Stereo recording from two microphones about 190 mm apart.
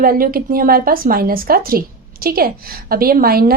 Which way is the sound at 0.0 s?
50° right (ahead or behind).